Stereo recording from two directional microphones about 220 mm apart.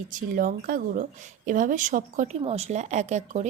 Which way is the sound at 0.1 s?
40° right (ahead or behind).